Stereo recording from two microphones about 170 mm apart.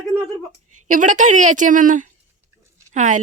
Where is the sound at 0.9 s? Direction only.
50° right (ahead or behind).